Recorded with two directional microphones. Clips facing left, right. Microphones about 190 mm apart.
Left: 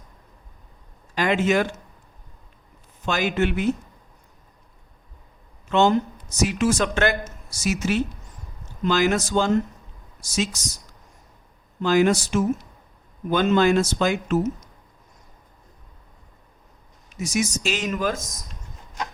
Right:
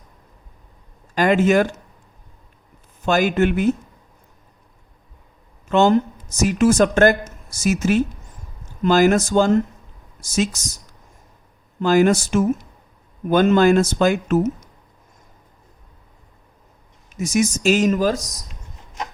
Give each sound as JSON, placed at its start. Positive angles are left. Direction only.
{"t": 1.1, "sound": "speech", "side_deg": -45}
{"t": 3.1, "sound": "speech", "side_deg": -45}
{"t": 5.6, "sound": "speech", "side_deg": -45}
{"t": 11.8, "sound": "speech", "side_deg": -45}
{"t": 17.2, "sound": "speech", "side_deg": -50}